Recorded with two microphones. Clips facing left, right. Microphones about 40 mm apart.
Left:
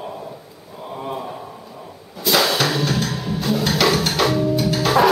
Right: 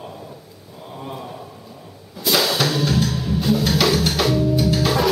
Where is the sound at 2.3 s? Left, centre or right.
Centre.